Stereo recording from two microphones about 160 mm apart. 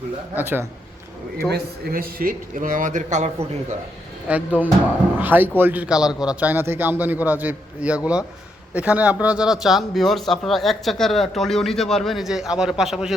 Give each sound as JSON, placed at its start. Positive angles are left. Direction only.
{"t": 0.3, "sound": "a man's voice", "side_deg": -15}
{"t": 1.5, "sound": "speech", "side_deg": -75}
{"t": 4.3, "sound": "a man's voice", "side_deg": -10}